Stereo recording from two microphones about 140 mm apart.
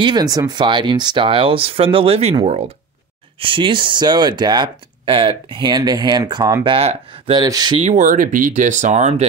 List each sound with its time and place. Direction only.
0.0 s speech: 30° right (ahead or behind); by 2.7 s 50° right (ahead or behind)
3.3 s speech: 40° right (ahead or behind)
7.4 s speech: 30° right (ahead or behind)
7.8 s speech: 50° right (ahead or behind)
8.1 s speech: 70° right (ahead or behind); by 9.3 s 55° right (ahead or behind)